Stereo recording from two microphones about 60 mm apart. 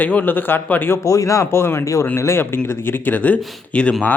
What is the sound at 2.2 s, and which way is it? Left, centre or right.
Speech, left.